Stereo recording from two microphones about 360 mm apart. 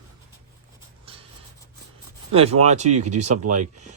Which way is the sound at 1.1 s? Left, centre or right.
Centre.